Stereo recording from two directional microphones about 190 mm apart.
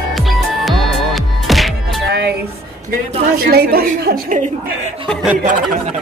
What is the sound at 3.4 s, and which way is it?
A woman's voice, 55° right (ahead or behind).